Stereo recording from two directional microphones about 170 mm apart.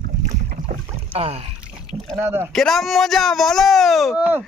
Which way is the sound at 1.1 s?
35° right (ahead or behind).